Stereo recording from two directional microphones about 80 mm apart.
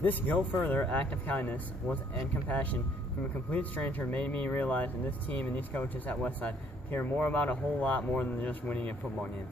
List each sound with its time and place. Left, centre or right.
0.0 s speech: left